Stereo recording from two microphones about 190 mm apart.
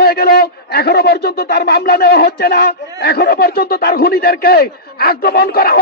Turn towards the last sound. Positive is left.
turn(degrees=55)  # may be behind; listen again after turning